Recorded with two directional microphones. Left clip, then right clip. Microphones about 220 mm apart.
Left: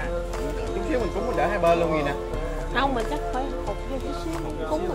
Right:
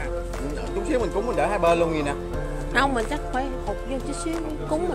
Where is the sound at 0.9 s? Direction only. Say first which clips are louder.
Right 2 dB; 40° right (ahead or behind).